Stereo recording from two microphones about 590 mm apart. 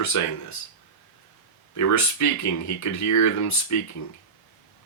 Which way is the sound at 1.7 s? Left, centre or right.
Left.